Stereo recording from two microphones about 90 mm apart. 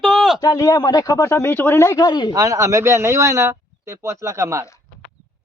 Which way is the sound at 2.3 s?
40° right (ahead or behind).